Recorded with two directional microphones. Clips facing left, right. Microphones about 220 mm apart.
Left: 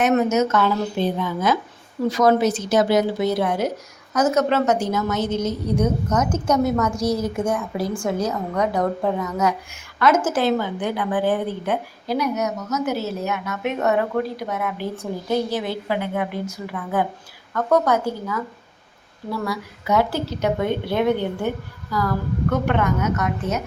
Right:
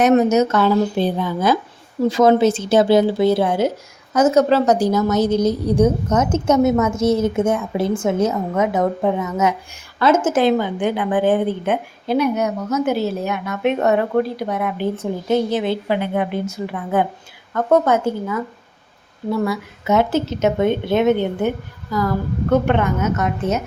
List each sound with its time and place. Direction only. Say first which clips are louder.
0.0 s a woman's voice: right 4 dB; 35° right (ahead or behind)